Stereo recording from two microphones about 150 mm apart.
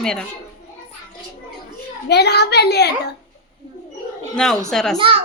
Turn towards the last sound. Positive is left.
turn(degrees=-35)  # may be behind; listen again after turning